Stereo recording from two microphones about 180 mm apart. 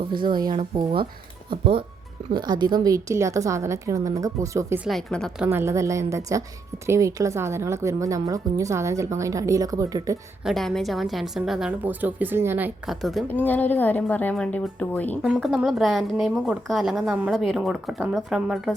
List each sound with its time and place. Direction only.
0.1 s a woman's voice: 25° right (ahead or behind)
4.9 s a woman's voice: centre (ahead or behind)
5.5 s speech: 15° right (ahead or behind)
10.4 s a woman's voice: centre (ahead or behind)
13.2 s a woman's voice: 10° left (ahead or behind)
15.2 s a woman's voice: centre (ahead or behind)